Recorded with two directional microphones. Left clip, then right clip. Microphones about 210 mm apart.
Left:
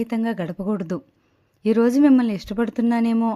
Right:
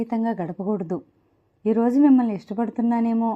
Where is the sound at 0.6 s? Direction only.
45° left (ahead or behind).